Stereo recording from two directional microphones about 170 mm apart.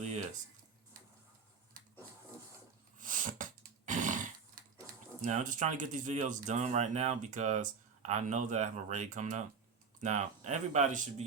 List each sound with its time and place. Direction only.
0.9 s tick-tock: 55° right (ahead or behind)
3.0 s a sound: 50° right (ahead or behind)
4.6 s pig: 55° right (ahead or behind)
5.2 s speech: 45° right (ahead or behind)